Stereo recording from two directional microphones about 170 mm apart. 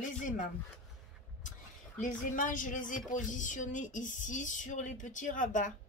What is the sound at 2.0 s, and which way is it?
Speech, 50° left (ahead or behind).